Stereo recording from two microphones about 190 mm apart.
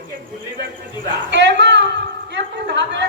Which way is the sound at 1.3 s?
70° right (ahead or behind).